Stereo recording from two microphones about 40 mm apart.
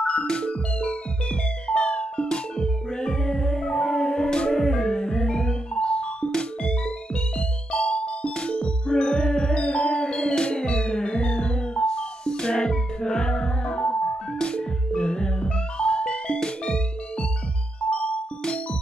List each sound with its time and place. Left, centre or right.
0.0 s music: left